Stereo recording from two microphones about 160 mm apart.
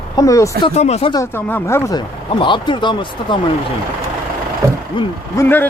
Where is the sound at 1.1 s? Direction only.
15° left (ahead or behind).